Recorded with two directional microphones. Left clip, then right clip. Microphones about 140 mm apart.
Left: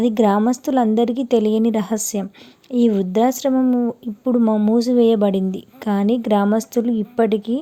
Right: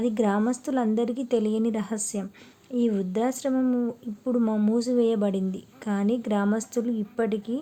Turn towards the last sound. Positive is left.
turn(degrees=40)  # may be behind; listen again after turning